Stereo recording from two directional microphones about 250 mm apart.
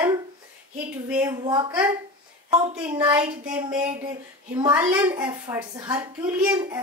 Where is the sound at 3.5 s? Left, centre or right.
Centre.